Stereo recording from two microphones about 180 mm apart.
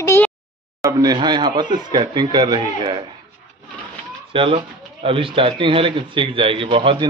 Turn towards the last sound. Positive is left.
turn(degrees=-30)  # may be behind; listen again after turning